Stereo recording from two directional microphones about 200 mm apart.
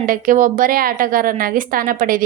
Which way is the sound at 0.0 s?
45° right (ahead or behind).